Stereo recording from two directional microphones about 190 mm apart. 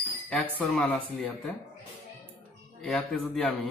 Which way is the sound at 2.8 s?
5° left (ahead or behind).